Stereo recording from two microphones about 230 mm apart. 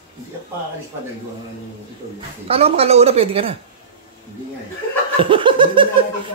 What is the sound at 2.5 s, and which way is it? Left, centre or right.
A woman's voice, right.